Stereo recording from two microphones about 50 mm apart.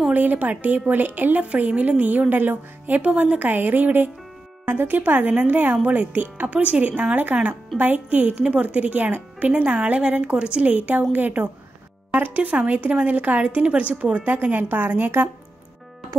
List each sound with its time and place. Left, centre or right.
0.1 s speech: right
9.5 s speech: right
14.2 s speech: right